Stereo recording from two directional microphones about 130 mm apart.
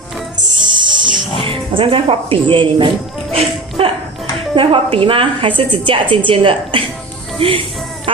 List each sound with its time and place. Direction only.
0.5 s music: 35° right (ahead or behind)
1.4 s speech: 40° right (ahead or behind)